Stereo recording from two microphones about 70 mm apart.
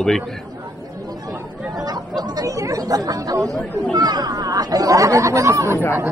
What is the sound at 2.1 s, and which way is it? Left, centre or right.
Chatter, right.